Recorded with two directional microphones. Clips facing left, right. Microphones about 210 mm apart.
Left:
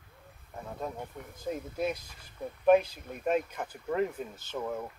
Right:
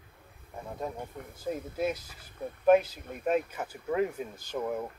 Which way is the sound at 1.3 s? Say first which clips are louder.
Right 1 dB; 5° right (ahead or behind).